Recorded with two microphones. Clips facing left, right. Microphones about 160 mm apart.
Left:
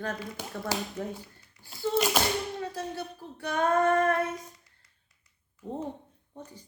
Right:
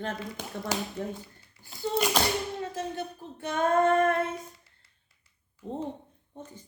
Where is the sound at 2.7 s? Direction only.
15° right (ahead or behind).